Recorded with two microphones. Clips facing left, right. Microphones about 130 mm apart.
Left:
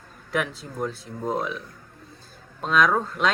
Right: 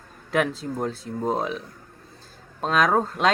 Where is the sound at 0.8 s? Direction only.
30° right (ahead or behind).